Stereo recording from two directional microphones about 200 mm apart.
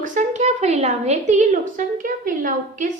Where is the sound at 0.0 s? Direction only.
40° right (ahead or behind).